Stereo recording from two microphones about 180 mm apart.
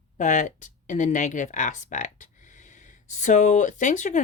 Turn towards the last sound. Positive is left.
turn(degrees=45)  # may be behind; listen again after turning